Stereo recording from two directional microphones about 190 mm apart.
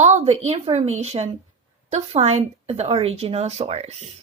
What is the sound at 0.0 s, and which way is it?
A woman's voice, 35° right (ahead or behind).